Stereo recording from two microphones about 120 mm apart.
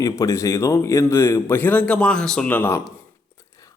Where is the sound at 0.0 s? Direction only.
30° left (ahead or behind).